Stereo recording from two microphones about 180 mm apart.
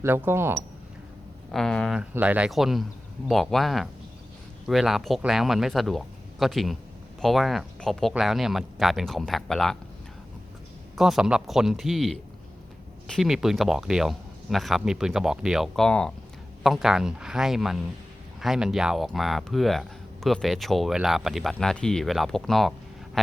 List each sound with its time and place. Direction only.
0.0 s speech: 10° right (ahead or behind)
1.5 s speech: centre (ahead or behind)
10.9 s speech: centre (ahead or behind)